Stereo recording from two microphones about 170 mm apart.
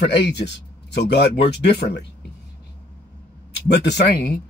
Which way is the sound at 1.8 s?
80° left.